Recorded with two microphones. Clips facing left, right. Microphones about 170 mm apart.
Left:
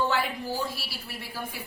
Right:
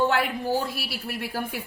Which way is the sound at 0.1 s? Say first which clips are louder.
Right 5 dB; 65° right (ahead or behind).